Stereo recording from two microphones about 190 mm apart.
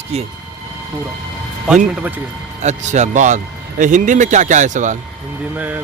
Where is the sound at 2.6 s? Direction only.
40° right (ahead or behind).